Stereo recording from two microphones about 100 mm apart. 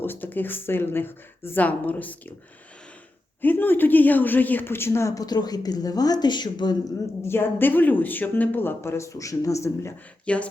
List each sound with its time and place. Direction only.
0.0 s speech: 20° left (ahead or behind)
3.4 s speech: 20° left (ahead or behind); by 6.9 s 45° left (ahead or behind)
7.3 s speech: 20° left (ahead or behind)
10.2 s speech: 15° left (ahead or behind)